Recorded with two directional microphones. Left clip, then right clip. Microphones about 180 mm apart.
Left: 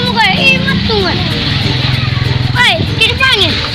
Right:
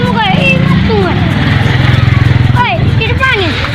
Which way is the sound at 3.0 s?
30° left (ahead or behind).